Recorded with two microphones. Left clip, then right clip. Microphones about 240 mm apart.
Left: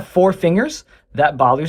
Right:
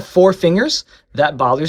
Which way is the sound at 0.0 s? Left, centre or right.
Centre.